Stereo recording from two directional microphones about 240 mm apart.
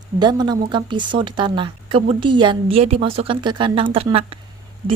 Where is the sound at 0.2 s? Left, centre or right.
Centre.